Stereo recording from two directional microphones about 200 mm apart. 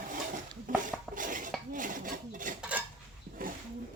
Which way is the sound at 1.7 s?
40° right (ahead or behind).